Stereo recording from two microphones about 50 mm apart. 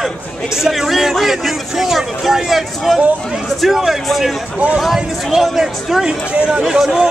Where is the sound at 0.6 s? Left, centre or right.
Centre.